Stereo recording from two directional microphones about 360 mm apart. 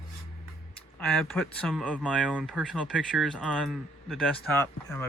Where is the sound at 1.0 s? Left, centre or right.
Centre.